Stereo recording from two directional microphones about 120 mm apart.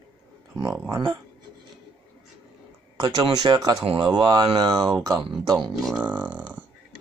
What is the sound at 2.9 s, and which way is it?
Speech, 30° right (ahead or behind).